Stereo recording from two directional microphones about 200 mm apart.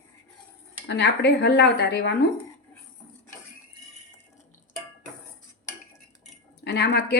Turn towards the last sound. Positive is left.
turn(degrees=55)  # may be behind; listen again after turning